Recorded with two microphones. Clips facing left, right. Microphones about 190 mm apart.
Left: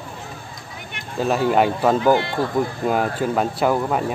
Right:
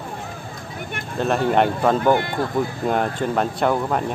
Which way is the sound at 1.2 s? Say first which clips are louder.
Left 1 dB; 5° left (ahead or behind).